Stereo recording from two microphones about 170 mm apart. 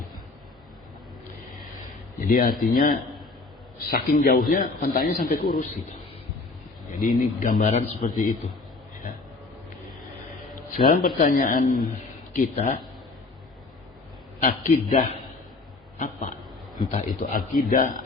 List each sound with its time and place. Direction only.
2.2 s a man's voice: 55° left (ahead or behind)
7.2 s a man's voice: 55° left (ahead or behind)
10.5 s a man's voice: 55° left (ahead or behind)
14.4 s a man's voice: 55° left (ahead or behind)
16.0 s a sound: 50° left (ahead or behind)
16.9 s a man's voice: 50° left (ahead or behind)